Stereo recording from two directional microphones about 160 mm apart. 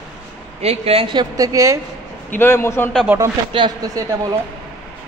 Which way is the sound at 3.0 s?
15° right (ahead or behind).